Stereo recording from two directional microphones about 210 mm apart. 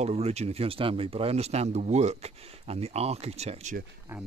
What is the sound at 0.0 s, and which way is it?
Speech, 30° right (ahead or behind).